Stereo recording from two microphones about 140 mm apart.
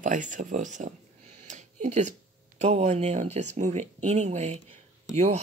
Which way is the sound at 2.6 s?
50° right (ahead or behind).